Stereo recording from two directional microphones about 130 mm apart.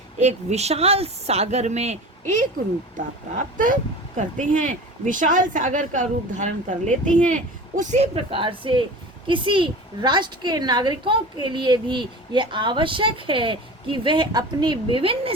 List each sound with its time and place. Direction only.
0.2 s speech: 60° right (ahead or behind)
3.0 s speech: 90° right
4.2 s a woman's voice: 75° right (ahead or behind); by 15.3 s 45° right (ahead or behind)